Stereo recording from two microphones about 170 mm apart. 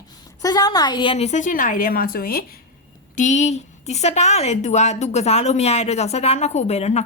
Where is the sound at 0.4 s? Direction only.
20° left (ahead or behind); by 2.6 s 60° left (ahead or behind).